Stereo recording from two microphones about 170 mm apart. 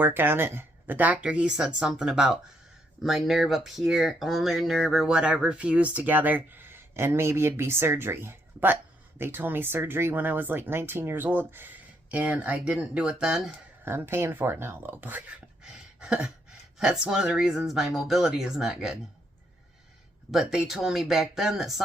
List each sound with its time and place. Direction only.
0.0 s speech: 10° right (ahead or behind)
20.3 s speech: centre (ahead or behind)